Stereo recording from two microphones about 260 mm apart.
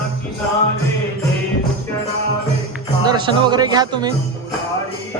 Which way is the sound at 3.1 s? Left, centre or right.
Centre.